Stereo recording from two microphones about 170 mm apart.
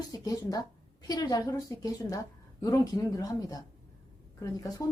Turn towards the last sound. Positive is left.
turn(degrees=20)  # may be behind; listen again after turning